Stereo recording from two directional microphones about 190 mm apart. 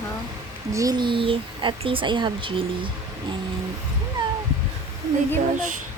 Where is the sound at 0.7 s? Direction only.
20° right (ahead or behind).